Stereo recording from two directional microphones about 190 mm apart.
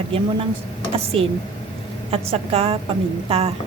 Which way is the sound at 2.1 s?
30° right (ahead or behind).